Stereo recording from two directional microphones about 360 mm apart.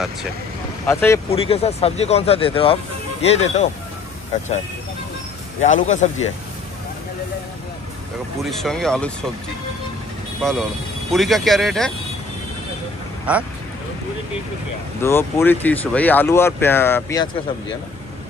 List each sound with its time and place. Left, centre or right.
0.8 s speech: centre
5.6 s speech: centre
8.5 s speech: centre
10.4 s speech: centre
13.3 s speech: centre
15.0 s speech: centre